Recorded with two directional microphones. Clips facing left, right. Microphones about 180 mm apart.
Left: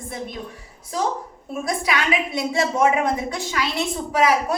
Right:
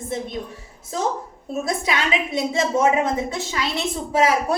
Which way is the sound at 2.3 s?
25° right (ahead or behind).